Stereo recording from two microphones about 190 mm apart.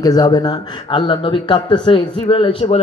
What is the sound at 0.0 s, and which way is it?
Speech, 20° left (ahead or behind).